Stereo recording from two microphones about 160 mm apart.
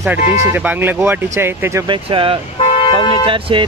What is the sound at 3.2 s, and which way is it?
Speech, 35° right (ahead or behind).